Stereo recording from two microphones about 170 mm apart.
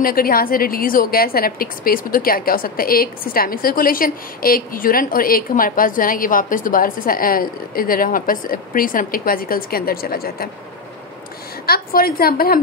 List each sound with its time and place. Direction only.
0.0 s a woman's voice: 60° left (ahead or behind)
11.6 s a woman's voice: 60° left (ahead or behind)